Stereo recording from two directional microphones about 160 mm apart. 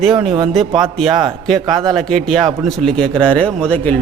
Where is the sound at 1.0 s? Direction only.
25° right (ahead or behind).